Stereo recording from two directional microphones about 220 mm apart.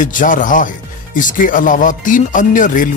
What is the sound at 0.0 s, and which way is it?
Speech, 35° left (ahead or behind).